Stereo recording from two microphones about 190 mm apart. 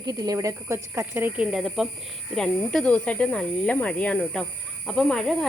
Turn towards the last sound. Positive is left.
turn(degrees=0)  # may be behind; listen again after turning